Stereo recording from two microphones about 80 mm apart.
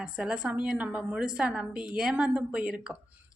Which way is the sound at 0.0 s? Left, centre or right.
Centre.